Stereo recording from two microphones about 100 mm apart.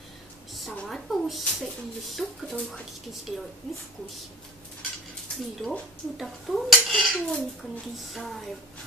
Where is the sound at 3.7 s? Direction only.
5° left (ahead or behind).